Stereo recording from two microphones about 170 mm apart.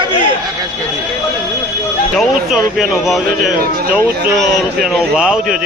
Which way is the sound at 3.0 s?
5° right (ahead or behind).